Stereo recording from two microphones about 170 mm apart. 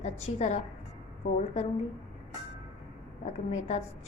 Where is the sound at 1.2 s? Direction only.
60° left (ahead or behind).